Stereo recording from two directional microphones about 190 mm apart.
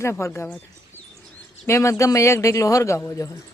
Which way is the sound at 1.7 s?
15° left (ahead or behind).